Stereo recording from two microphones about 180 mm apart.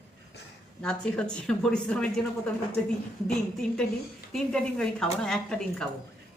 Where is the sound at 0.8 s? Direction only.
5° left (ahead or behind).